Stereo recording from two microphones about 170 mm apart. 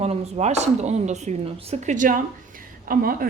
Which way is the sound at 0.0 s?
40° right (ahead or behind).